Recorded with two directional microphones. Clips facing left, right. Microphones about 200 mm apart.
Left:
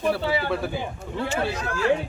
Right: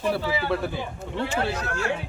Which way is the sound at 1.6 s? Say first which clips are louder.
Left 3 dB; 45° right (ahead or behind).